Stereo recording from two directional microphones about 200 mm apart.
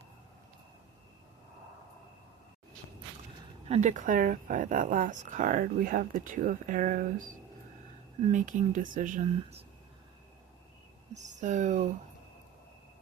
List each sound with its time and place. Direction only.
3.7 s speech: 35° right (ahead or behind)
8.2 s speech: 40° right (ahead or behind)
11.1 s speech: 35° right (ahead or behind)